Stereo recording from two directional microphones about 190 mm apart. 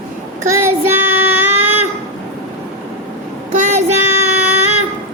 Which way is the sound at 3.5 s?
40° right (ahead or behind).